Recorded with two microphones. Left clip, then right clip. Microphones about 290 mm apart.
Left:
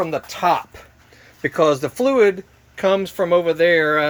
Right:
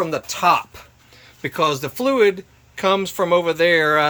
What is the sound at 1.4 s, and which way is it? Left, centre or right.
Speech, centre.